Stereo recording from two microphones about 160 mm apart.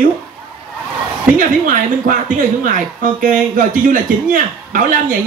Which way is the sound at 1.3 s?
55° right (ahead or behind).